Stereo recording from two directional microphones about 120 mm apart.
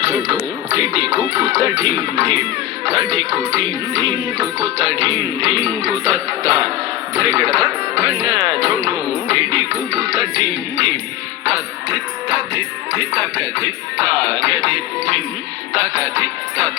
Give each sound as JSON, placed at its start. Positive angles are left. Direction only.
{"t": 0.0, "sound": "speech", "side_deg": -35}
{"t": 4.6, "sound": "speech", "side_deg": -35}
{"t": 8.3, "sound": "speech", "side_deg": -40}
{"t": 9.2, "sound": "music", "side_deg": -35}
{"t": 13.1, "sound": "speech", "side_deg": -25}
{"t": 16.0, "sound": "speech", "side_deg": -25}